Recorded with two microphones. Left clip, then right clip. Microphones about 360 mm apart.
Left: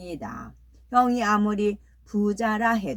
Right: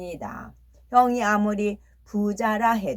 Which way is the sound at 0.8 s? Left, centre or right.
Centre.